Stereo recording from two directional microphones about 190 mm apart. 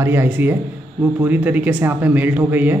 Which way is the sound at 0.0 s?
10° right (ahead or behind).